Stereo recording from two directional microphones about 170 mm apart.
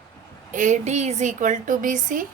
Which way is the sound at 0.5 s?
45° right (ahead or behind).